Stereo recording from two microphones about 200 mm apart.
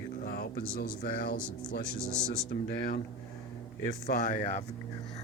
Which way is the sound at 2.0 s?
5° left (ahead or behind).